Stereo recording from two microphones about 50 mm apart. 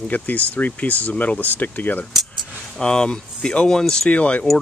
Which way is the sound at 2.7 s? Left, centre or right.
Centre.